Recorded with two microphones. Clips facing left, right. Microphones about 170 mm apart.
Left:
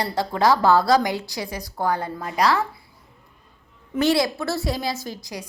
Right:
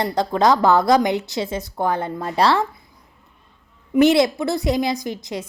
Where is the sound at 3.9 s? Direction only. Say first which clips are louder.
Right 6 dB; 20° right (ahead or behind).